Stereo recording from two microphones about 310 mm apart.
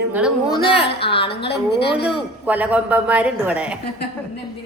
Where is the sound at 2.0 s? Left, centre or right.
Centre.